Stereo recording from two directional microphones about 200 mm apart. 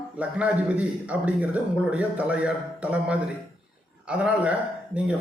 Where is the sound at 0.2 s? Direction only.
5° right (ahead or behind).